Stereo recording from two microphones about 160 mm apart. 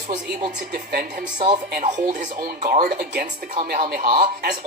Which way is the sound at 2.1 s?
50° right (ahead or behind).